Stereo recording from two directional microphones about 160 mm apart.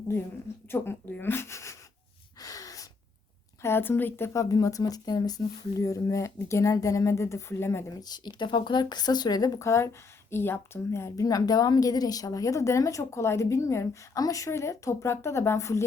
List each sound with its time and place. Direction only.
0.7 s speech: 15° left (ahead or behind)
2.4 s gasp: 20° left (ahead or behind)
3.6 s speech: 15° left (ahead or behind)